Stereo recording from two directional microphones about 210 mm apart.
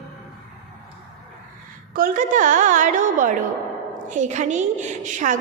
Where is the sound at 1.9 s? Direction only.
40° right (ahead or behind).